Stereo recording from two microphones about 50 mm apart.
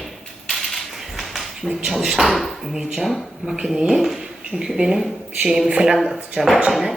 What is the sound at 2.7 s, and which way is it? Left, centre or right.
Speech, centre.